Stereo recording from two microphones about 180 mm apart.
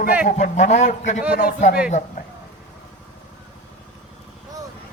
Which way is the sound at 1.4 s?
55° left (ahead or behind).